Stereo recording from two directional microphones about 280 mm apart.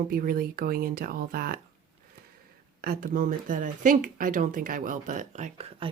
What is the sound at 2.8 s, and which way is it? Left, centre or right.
Speech, right.